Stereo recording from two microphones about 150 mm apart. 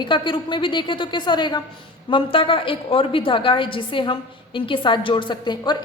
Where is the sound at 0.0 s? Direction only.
35° left (ahead or behind).